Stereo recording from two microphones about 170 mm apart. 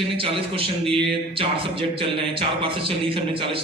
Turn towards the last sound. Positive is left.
turn(degrees=-30)  # may be behind; listen again after turning